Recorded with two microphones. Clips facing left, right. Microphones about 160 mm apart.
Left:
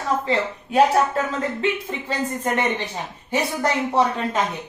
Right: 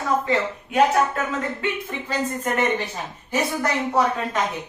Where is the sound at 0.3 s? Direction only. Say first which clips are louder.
Even; 30° left (ahead or behind).